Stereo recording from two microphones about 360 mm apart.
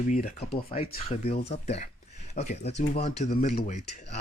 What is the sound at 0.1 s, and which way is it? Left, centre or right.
Speech, centre.